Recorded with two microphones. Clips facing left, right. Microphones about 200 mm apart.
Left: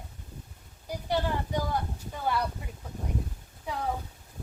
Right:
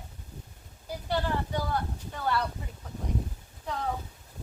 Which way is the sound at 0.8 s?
15° left (ahead or behind).